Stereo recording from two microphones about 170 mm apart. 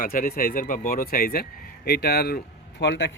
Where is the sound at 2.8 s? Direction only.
90° left.